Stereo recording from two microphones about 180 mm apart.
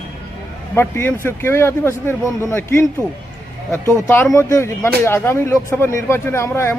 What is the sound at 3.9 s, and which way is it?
Speech, 15° left (ahead or behind).